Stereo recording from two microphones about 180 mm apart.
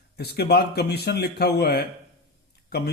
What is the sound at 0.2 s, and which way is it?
Speech, 60° left (ahead or behind).